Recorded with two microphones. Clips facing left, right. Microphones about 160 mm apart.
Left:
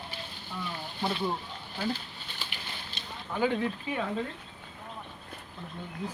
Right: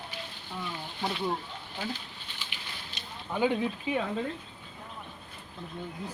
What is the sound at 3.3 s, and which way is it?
Speech, 15° right (ahead or behind).